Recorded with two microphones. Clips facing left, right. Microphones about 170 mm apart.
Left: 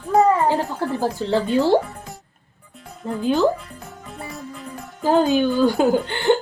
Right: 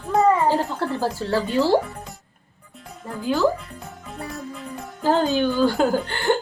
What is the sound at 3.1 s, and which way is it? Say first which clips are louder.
Speech: left 2 dB; 20° left (ahead or behind).